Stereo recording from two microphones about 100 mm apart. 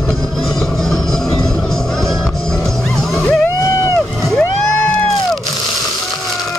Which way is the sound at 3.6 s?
30° left (ahead or behind).